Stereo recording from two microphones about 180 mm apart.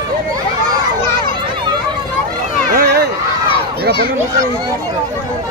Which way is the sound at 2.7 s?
55° right (ahead or behind).